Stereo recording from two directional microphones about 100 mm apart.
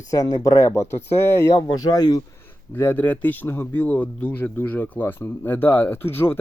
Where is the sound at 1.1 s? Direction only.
25° left (ahead or behind).